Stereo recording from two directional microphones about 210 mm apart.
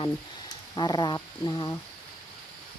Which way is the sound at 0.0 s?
20° left (ahead or behind).